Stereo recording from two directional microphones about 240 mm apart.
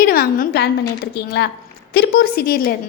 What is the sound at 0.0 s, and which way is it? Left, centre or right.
A woman's voice, left.